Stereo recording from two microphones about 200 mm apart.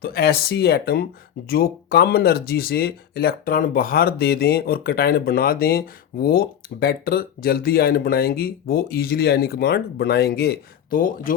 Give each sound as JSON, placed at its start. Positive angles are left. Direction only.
{"t": 0.0, "sound": "speech", "side_deg": 50}